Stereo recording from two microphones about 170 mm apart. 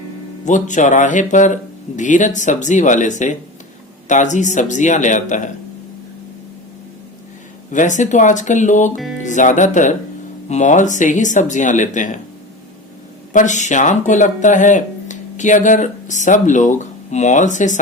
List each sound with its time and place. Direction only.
0.4 s speech: 45° left (ahead or behind)
7.7 s speech: 45° left (ahead or behind)
13.3 s speech: 45° left (ahead or behind)